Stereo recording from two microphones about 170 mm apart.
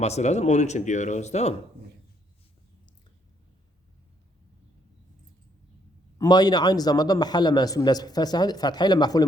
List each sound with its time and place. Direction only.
0.0 s speech: 40° left (ahead or behind)
6.1 s a man's voice: 25° left (ahead or behind)